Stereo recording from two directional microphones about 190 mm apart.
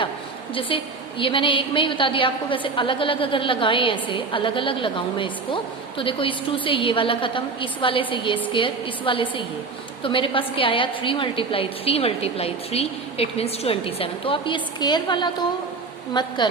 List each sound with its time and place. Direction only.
1.2 s a woman's voice: 25° left (ahead or behind)